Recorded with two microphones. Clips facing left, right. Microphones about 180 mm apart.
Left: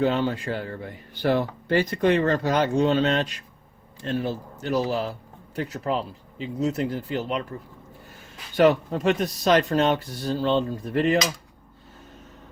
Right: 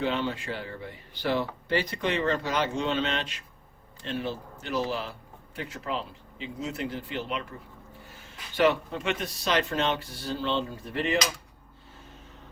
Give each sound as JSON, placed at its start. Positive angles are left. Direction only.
{"t": 0.0, "sound": "speech", "side_deg": 45}
{"t": 8.5, "sound": "speech", "side_deg": 40}